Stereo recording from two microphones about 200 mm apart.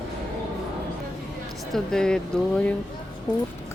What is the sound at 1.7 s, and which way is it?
Speech, 5° left (ahead or behind).